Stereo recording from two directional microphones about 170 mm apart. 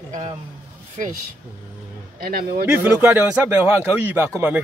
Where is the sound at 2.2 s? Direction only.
60° right (ahead or behind).